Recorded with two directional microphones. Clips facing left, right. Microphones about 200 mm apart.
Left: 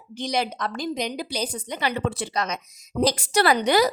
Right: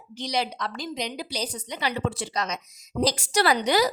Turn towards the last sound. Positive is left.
turn(degrees=55)  # may be behind; listen again after turning